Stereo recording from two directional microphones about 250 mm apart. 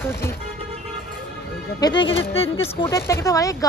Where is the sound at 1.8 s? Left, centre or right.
Centre.